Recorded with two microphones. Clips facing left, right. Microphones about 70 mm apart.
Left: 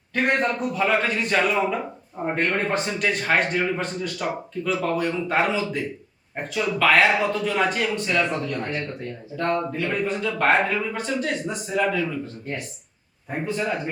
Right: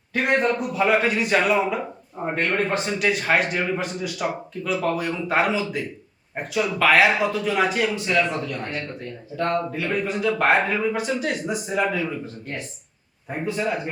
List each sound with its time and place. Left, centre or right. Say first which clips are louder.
0.1 s a man's voice: right 1 dB; centre
13.4 s a man's voice: right 1 dB; centre